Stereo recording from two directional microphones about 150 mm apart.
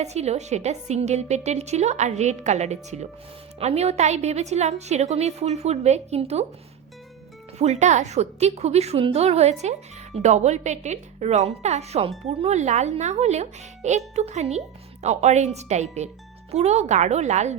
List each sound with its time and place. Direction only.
0.0 s a woman's voice: 45° right (ahead or behind)
7.6 s a woman's voice: 50° right (ahead or behind)